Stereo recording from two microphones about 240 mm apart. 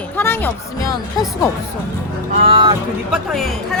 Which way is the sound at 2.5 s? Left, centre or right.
Centre.